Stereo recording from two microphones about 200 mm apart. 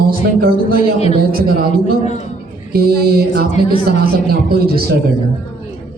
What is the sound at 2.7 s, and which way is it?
Speech, 50° right (ahead or behind).